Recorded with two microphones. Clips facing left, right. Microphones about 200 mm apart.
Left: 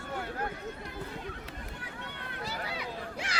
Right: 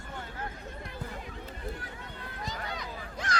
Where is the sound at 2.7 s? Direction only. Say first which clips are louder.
Left 2 dB; 10° left (ahead or behind).